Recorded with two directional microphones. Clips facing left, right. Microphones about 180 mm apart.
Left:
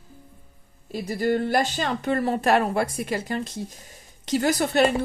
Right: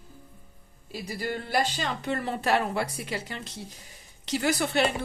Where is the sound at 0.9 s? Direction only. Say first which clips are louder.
Left 9 dB; 45° left (ahead or behind).